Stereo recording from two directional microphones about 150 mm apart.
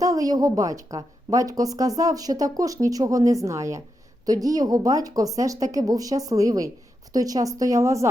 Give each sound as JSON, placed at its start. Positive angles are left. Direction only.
{"t": 0.0, "sound": "a woman's voice", "side_deg": -25}